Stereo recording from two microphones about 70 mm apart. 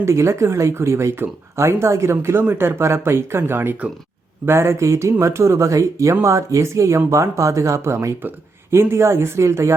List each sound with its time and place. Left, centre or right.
0.0 s speech: right